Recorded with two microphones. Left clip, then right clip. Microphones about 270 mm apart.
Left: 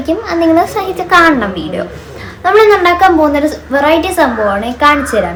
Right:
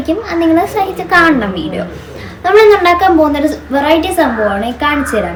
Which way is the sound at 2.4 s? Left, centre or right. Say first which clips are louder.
Even; centre.